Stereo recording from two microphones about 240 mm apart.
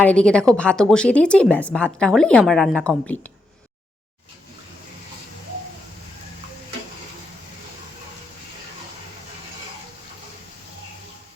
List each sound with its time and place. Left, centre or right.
0.0 s speech: centre